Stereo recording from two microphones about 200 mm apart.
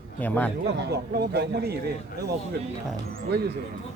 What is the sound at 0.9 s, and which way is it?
Speech, 55° right (ahead or behind).